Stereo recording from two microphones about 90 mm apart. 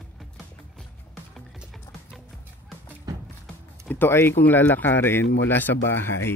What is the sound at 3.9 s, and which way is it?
Speech, 25° left (ahead or behind).